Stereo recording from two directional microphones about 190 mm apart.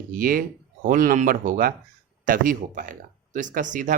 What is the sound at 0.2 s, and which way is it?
Speech, 50° right (ahead or behind).